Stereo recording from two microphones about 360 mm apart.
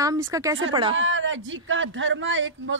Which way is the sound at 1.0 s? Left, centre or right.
Right.